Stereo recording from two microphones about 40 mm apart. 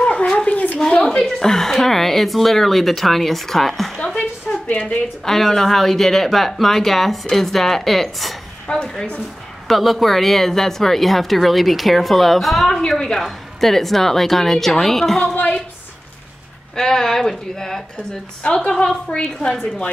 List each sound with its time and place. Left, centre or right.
0.0 s a sound: left
0.5 s a sound: left
1.0 s a woman's voice: centre
4.6 s a woman's voice: left
5.2 s speech: centre
8.7 s a woman's voice: left
9.7 s a woman's voice: centre
16.7 s a woman's voice: centre
18.4 s a woman's voice: left